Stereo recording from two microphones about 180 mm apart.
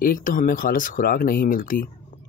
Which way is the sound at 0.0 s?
50° left (ahead or behind).